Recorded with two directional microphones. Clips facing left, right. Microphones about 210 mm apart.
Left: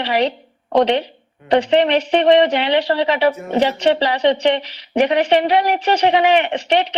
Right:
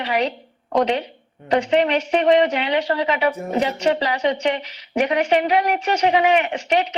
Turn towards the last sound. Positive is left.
turn(degrees=30)  # may be behind; listen again after turning